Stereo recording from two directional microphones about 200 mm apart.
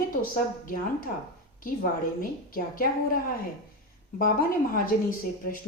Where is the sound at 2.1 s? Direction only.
45° left (ahead or behind).